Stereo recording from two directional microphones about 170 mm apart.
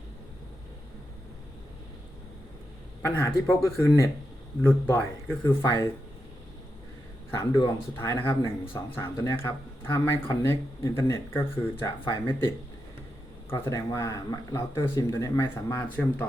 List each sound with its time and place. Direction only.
3.2 s speech: 15° left (ahead or behind)
7.5 s speech: 30° left (ahead or behind)
7.9 s speech: 15° left (ahead or behind)
13.5 s speech: 20° left (ahead or behind)